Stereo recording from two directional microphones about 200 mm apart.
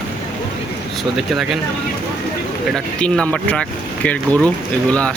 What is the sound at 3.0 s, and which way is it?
Speech, 5° left (ahead or behind).